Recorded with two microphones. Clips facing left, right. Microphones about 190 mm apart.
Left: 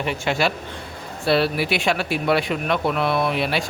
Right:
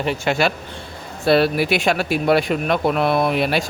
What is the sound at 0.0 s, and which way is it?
Speech, 35° right (ahead or behind).